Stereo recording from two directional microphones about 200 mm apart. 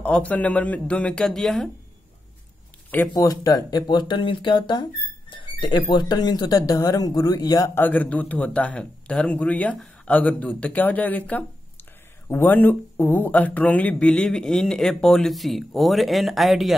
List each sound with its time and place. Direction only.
0.0 s speech: 5° left (ahead or behind)
3.1 s speech: 20° left (ahead or behind); by 16.7 s centre (ahead or behind)